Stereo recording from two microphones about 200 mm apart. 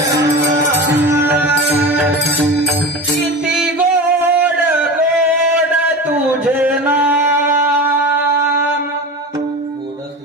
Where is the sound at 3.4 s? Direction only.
5° right (ahead or behind).